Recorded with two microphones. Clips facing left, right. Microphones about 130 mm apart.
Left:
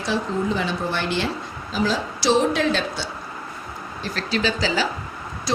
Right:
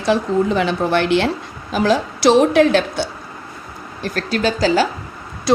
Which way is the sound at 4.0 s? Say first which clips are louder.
Right 5 dB; 50° right (ahead or behind).